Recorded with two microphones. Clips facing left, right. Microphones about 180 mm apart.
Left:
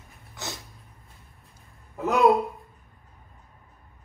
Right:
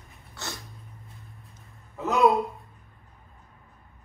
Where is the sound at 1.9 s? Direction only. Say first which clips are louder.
Left 1 dB; centre (ahead or behind).